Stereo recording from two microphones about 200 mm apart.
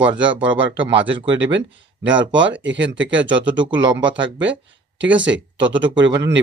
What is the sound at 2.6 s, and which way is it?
Speech, 65° right (ahead or behind).